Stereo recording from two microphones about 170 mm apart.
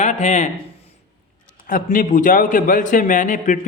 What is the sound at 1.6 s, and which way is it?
A man's voice, 50° left (ahead or behind).